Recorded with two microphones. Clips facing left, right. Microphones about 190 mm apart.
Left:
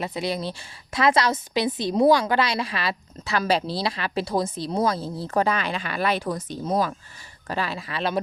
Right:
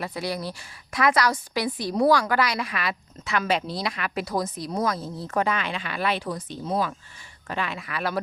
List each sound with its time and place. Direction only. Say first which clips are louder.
0.0 s a woman's voice: left 2 dB; 20° left (ahead or behind)